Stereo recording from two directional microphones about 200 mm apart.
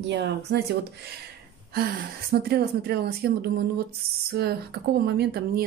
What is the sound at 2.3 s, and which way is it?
A woman's voice, 50° right (ahead or behind).